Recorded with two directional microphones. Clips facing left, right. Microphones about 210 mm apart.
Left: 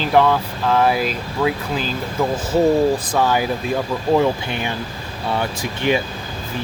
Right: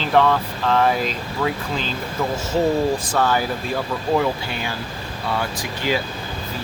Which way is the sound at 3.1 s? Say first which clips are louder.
Left 2 dB; 15° left (ahead or behind).